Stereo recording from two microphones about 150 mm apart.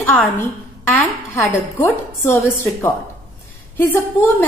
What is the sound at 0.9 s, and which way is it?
A woman's voice, 15° left (ahead or behind).